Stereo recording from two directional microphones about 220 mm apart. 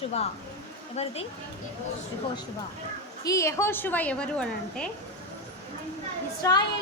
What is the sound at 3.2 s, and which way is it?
A woman's voice, 15° left (ahead or behind).